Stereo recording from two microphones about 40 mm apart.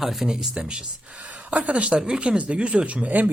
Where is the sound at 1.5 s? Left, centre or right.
Right.